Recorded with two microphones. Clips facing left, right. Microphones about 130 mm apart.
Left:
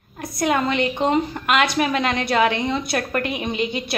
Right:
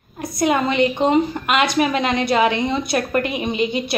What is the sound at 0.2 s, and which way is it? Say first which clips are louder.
A woman's voice: right 2 dB; 20° right (ahead or behind).